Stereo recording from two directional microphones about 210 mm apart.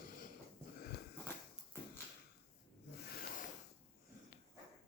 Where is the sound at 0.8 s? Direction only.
50° left (ahead or behind).